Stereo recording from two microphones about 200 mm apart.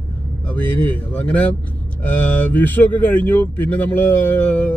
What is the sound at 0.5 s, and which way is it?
Speech, 10° left (ahead or behind).